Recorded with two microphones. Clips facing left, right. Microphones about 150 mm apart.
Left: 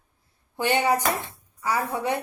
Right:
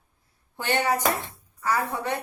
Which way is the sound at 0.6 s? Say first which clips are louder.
Left 2 dB; 10° left (ahead or behind).